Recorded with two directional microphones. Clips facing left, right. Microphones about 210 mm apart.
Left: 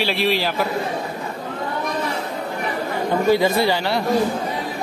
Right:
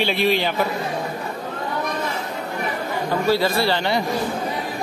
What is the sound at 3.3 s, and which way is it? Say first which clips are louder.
Speech: left 2 dB; 15° left (ahead or behind).